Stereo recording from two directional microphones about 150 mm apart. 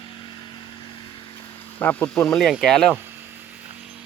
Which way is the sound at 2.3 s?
Centre (ahead or behind).